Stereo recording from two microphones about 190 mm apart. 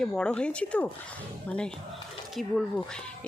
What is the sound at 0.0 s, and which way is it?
Speech, 5° left (ahead or behind).